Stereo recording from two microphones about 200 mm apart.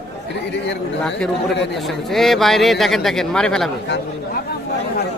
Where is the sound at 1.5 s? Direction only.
55° left (ahead or behind).